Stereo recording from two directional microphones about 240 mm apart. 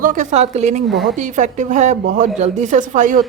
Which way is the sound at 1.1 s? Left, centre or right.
Right.